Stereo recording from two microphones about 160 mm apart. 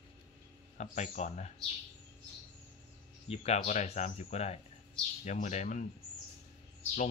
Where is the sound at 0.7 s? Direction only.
45° left (ahead or behind).